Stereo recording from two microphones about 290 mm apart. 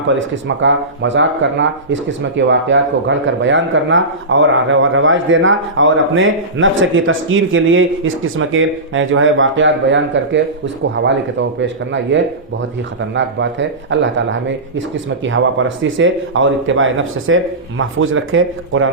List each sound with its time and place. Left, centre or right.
0.2 s speech: right